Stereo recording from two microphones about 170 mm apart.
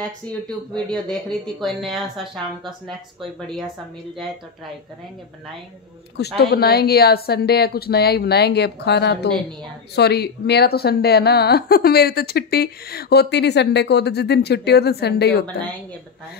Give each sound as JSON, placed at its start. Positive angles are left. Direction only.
{"t": 0.8, "sound": "speech", "side_deg": 5}
{"t": 6.1, "sound": "a woman's voice", "side_deg": 70}